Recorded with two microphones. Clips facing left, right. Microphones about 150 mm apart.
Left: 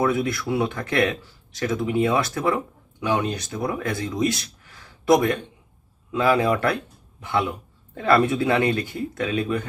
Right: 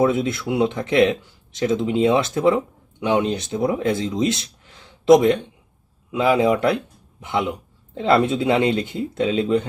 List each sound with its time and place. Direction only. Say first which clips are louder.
0.0 s a man's voice: right 3 dB; 25° right (ahead or behind)